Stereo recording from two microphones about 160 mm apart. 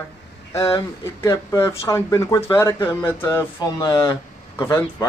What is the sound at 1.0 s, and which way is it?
A man's voice, 20° left (ahead or behind).